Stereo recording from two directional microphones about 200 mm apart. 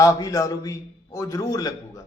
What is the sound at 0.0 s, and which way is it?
Speech, 15° left (ahead or behind).